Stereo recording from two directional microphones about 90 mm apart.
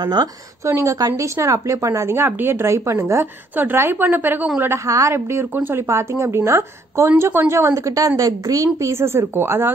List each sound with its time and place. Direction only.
0.0 s speech: 50° right (ahead or behind)
0.7 s speech: 35° right (ahead or behind)
3.5 s speech: 25° right (ahead or behind)
5.9 s speech: 35° right (ahead or behind)